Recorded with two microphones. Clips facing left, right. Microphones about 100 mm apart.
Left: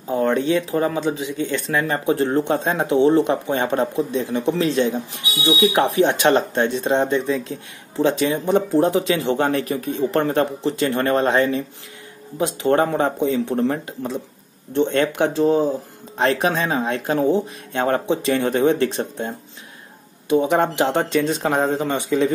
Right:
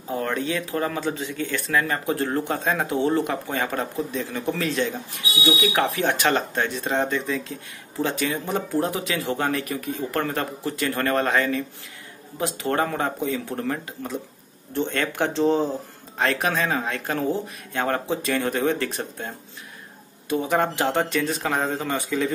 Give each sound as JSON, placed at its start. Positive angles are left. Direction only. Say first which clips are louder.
{"t": 0.1, "sound": "speech", "louder": "left 7 dB", "side_deg": 25}
{"t": 15.3, "sound": "speech", "louder": "left 3 dB", "side_deg": 5}
{"t": 16.2, "sound": "speech", "louder": "left 4 dB", "side_deg": 20}